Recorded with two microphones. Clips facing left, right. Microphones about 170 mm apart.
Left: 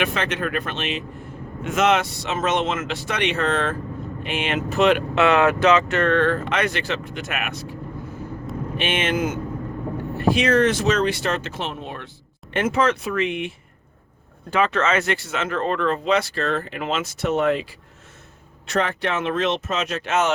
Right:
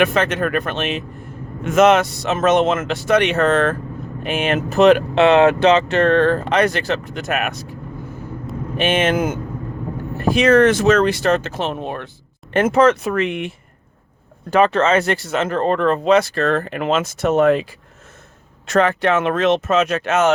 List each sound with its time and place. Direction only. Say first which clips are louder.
0.0 s speech: right 7 dB; 45° right (ahead or behind)
8.8 s speech: right 6 dB; 45° right (ahead or behind)
14.5 s speech: right 6 dB; 35° right (ahead or behind)